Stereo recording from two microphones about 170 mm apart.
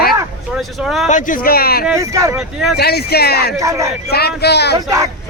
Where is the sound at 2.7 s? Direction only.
70° left (ahead or behind).